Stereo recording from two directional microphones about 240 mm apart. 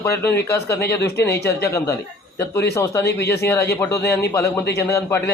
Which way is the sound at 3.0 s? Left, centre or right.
Left.